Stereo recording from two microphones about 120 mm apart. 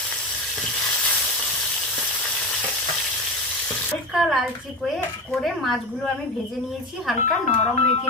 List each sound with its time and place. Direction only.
4.1 s speech: 5° right (ahead or behind)
7.2 s speech: 70° left (ahead or behind)